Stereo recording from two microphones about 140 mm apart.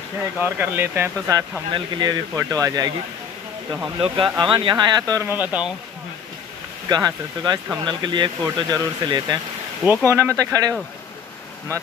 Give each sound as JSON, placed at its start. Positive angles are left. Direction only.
{"t": 0.4, "sound": "speech", "side_deg": -15}
{"t": 1.7, "sound": "speech", "side_deg": -30}
{"t": 4.0, "sound": "speech", "side_deg": -35}
{"t": 5.3, "sound": "speech", "side_deg": -10}
{"t": 6.9, "sound": "speech", "side_deg": -30}
{"t": 10.0, "sound": "speech", "side_deg": -20}